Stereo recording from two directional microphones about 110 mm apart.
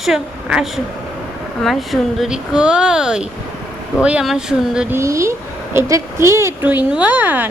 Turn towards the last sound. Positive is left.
turn(degrees=-15)  # may be behind; listen again after turning